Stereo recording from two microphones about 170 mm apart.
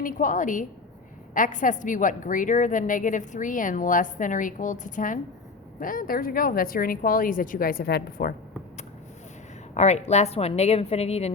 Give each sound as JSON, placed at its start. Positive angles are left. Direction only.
{"t": 0.0, "sound": "a woman's voice", "side_deg": 50}
{"t": 9.7, "sound": "a woman's voice", "side_deg": 40}